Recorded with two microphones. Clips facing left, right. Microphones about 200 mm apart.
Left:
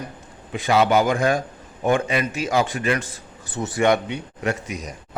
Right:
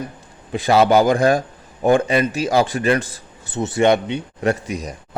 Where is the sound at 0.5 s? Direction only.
35° right (ahead or behind).